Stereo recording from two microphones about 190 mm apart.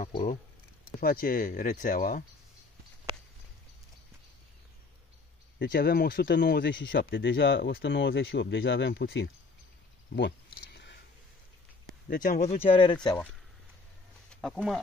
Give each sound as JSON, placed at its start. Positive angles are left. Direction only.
{"t": 1.0, "sound": "speech", "side_deg": 50}
{"t": 5.6, "sound": "speech", "side_deg": 60}
{"t": 10.1, "sound": "a sound", "side_deg": 65}
{"t": 12.1, "sound": "speech", "side_deg": 45}
{"t": 14.3, "sound": "speech", "side_deg": 0}